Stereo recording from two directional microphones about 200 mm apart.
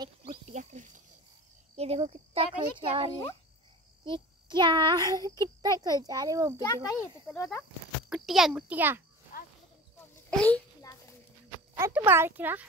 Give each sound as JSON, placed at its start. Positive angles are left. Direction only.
{"t": 0.3, "sound": "pig", "side_deg": -35}
{"t": 1.8, "sound": "a child's voice", "side_deg": -30}
{"t": 6.6, "sound": "speech", "side_deg": 15}
{"t": 8.1, "sound": "a child's voice", "side_deg": 0}
{"t": 9.3, "sound": "a sound", "side_deg": 45}
{"t": 10.3, "sound": "speech", "side_deg": 5}
{"t": 10.8, "sound": "a sound", "side_deg": 15}
{"t": 11.7, "sound": "speech", "side_deg": -10}